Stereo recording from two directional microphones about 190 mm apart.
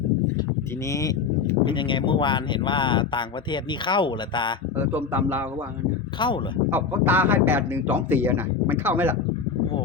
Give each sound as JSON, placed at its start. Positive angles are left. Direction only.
{"t": 0.9, "sound": "speech", "side_deg": 15}
{"t": 4.8, "sound": "speech", "side_deg": -10}
{"t": 6.1, "sound": "speech", "side_deg": 25}
{"t": 6.7, "sound": "speech", "side_deg": -10}